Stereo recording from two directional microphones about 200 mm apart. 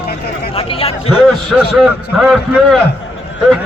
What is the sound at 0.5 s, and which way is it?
Speech, 30° left (ahead or behind).